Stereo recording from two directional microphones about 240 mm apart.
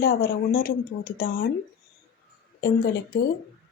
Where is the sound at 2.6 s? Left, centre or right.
Left.